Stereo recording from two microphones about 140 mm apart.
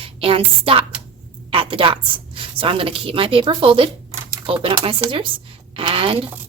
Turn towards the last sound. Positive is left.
turn(degrees=-40)  # may be behind; listen again after turning